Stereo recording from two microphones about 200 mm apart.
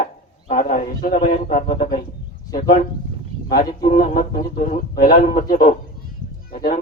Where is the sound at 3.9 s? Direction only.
40° left (ahead or behind).